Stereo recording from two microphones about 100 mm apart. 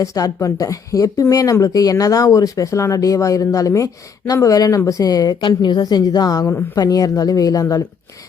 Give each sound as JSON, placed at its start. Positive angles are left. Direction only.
{"t": 0.0, "sound": "speech", "side_deg": 35}